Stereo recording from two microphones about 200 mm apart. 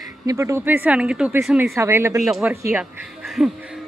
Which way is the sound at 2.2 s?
Centre (ahead or behind).